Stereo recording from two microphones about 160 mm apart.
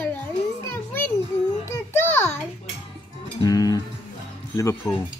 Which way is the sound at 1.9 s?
15° left (ahead or behind).